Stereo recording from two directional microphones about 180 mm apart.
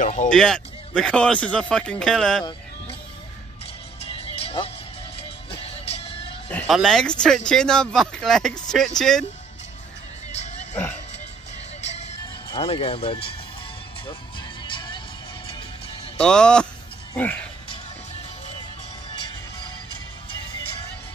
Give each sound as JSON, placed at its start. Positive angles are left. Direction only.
{"t": 0.0, "sound": "speech", "side_deg": 45}
{"t": 0.3, "sound": "speech", "side_deg": 5}
{"t": 4.1, "sound": "music", "side_deg": 30}
{"t": 6.5, "sound": "speech", "side_deg": 5}
{"t": 10.3, "sound": "music", "side_deg": 40}
{"t": 11.8, "sound": "music", "side_deg": 35}
{"t": 14.6, "sound": "music", "side_deg": 25}
{"t": 16.2, "sound": "speech", "side_deg": 5}